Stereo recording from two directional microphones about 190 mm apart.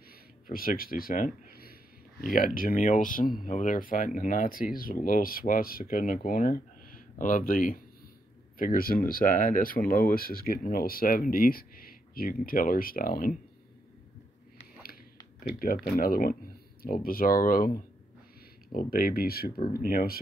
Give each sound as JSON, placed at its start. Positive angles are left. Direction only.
{"t": 0.5, "sound": "speech", "side_deg": 50}
{"t": 15.6, "sound": "speech", "side_deg": 50}